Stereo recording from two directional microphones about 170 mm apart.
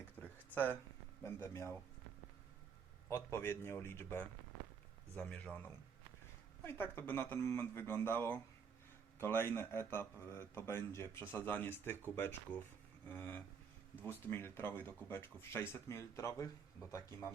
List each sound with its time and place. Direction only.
0.2 s a sound: 10° left (ahead or behind)
1.2 s speech: 15° left (ahead or behind)
3.1 s speech: 15° left (ahead or behind)